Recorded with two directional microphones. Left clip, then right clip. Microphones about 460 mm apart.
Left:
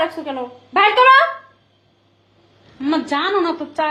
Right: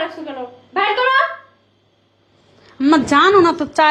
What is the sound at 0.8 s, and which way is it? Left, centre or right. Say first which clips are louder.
Speech: left 5 dB; left.